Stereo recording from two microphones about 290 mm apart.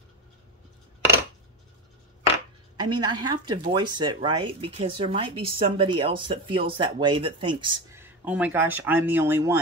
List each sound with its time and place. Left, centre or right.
2.8 s speech: centre